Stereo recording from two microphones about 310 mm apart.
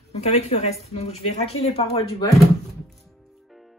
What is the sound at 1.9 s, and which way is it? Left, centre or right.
Speech, centre.